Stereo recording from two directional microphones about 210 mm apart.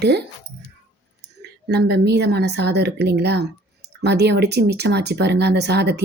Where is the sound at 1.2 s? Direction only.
50° right (ahead or behind).